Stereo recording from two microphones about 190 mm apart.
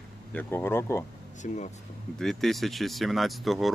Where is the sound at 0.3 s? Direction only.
15° left (ahead or behind).